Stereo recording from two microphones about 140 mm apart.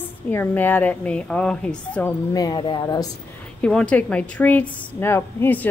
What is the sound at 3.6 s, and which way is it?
Speech, 5° left (ahead or behind).